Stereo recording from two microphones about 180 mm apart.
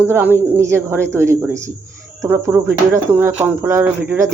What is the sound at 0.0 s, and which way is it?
Speech, 10° right (ahead or behind).